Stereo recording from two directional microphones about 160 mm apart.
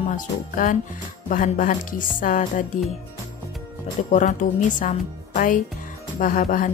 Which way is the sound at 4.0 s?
50° left (ahead or behind).